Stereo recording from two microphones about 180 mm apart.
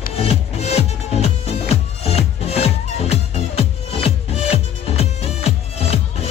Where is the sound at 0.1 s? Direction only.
35° left (ahead or behind).